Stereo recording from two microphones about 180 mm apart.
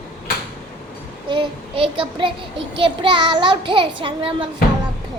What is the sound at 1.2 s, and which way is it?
Child singing, 30° right (ahead or behind).